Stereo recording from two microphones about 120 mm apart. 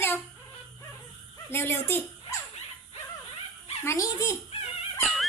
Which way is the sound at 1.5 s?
20° left (ahead or behind).